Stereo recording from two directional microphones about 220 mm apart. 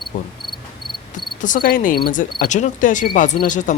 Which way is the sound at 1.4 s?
35° left (ahead or behind).